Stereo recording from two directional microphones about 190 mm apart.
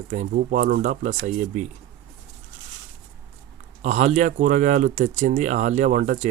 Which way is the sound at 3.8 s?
40° right (ahead or behind).